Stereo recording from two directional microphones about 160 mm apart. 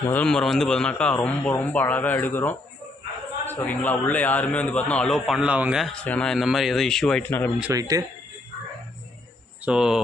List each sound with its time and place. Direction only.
0.1 s a man's voice: 5° left (ahead or behind)
7.7 s speech: 20° right (ahead or behind)
9.6 s a man's voice: 5° right (ahead or behind)